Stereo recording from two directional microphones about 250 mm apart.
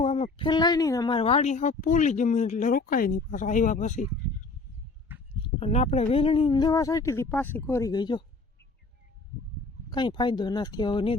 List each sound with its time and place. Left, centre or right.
0.0 s a woman's voice: left
5.5 s speech: left
9.9 s speech: centre